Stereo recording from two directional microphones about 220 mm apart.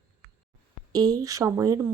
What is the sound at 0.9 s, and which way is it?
Speech, 15° right (ahead or behind).